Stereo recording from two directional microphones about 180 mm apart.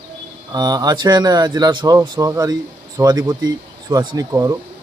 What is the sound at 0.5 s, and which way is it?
Speech, 20° right (ahead or behind).